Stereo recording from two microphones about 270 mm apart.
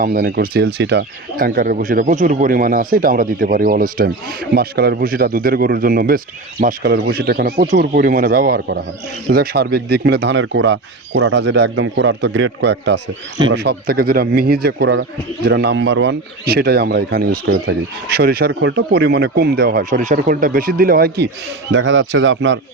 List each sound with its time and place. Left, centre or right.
0.0 s a man's voice: right